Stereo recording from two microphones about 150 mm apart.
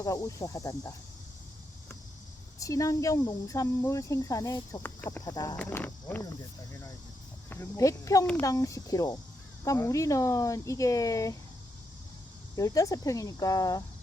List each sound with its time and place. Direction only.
0.0 s speech: 20° left (ahead or behind)
2.6 s speech: 20° left (ahead or behind)
7.5 s speech: 20° left (ahead or behind)
12.5 s speech: 20° left (ahead or behind)